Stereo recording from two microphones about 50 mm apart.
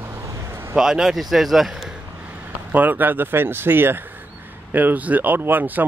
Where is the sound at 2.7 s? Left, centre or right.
Right.